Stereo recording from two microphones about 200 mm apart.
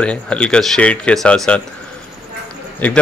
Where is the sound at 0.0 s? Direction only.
5° left (ahead or behind).